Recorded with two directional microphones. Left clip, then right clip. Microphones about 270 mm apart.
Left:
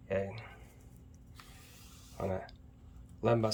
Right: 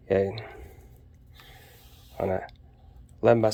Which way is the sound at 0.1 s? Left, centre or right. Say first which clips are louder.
Right 11 dB; right.